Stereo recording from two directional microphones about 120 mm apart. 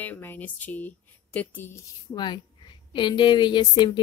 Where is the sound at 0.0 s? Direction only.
15° left (ahead or behind).